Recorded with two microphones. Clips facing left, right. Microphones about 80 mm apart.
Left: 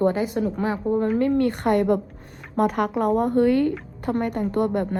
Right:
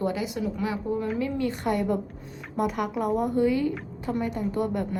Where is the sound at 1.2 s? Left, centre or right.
Left.